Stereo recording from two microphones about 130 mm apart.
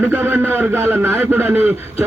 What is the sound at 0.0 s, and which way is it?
A man's voice, 15° right (ahead or behind).